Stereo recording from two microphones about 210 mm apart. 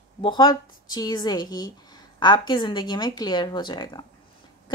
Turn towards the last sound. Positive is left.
turn(degrees=20)  # may be behind; listen again after turning